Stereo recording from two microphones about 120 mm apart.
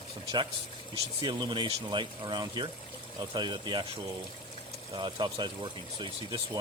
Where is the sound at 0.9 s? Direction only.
40° right (ahead or behind).